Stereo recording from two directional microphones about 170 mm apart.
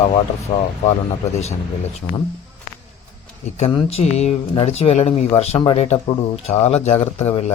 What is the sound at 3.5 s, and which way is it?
Speech, 35° left (ahead or behind).